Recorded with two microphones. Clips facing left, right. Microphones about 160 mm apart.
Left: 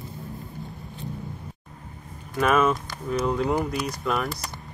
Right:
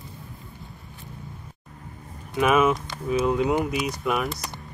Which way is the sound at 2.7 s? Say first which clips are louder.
Right 2 dB; centre (ahead or behind).